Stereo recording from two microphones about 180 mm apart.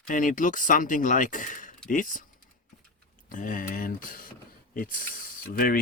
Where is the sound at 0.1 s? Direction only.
45° left (ahead or behind).